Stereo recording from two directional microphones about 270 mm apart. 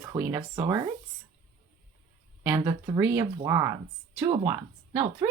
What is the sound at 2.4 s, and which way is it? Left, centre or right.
Speech, centre.